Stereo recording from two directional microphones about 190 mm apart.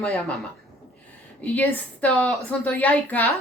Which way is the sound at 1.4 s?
10° left (ahead or behind).